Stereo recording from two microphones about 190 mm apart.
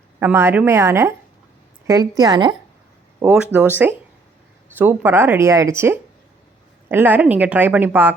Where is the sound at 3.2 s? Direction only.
10° right (ahead or behind).